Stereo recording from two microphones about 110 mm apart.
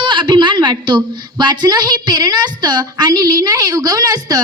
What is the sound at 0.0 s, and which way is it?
A woman's voice, 45° right (ahead or behind).